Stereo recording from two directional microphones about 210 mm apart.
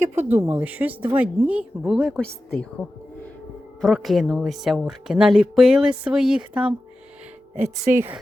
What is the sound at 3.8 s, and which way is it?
Speech, centre (ahead or behind).